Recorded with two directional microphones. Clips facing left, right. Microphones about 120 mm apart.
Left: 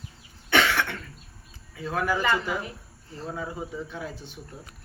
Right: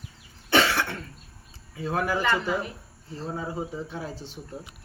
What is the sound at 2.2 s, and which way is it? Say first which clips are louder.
Speech: even; centre (ahead or behind).